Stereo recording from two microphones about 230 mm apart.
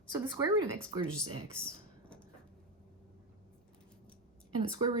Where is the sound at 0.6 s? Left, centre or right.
Right.